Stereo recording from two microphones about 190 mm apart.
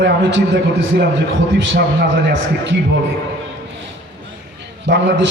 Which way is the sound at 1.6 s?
60° right (ahead or behind).